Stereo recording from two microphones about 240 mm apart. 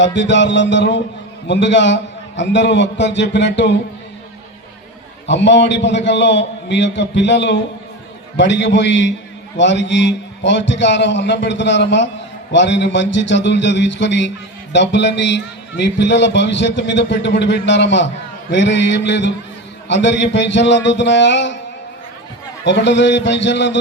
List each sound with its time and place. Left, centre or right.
0.0 s a man's voice: left
5.2 s a man's voice: left
22.6 s a man's voice: left